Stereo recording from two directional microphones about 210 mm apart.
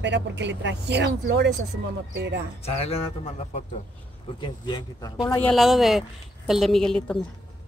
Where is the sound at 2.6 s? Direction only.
30° left (ahead or behind).